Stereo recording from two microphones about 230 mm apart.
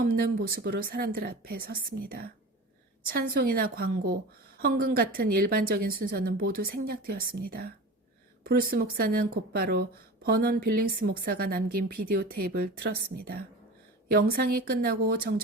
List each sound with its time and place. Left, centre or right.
0.0 s a woman's voice: right